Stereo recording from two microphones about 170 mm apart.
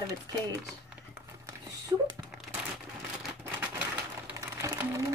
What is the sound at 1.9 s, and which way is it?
Speech, 20° right (ahead or behind).